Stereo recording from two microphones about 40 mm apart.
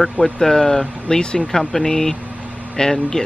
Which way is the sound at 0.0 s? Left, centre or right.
Centre.